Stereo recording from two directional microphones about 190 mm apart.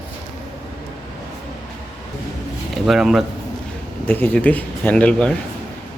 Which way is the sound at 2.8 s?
Centre (ahead or behind).